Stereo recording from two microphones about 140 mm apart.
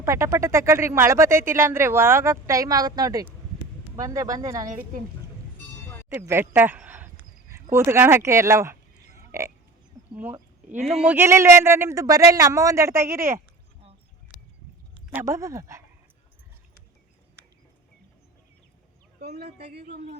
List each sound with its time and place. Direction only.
0.0 s speech: 20° right (ahead or behind)
6.1 s speech: 15° right (ahead or behind)
11.2 s speech: 20° right (ahead or behind)
15.1 s speech: 20° right (ahead or behind)